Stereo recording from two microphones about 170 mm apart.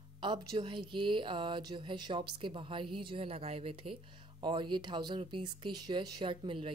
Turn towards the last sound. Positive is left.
turn(degrees=-30)  # may be behind; listen again after turning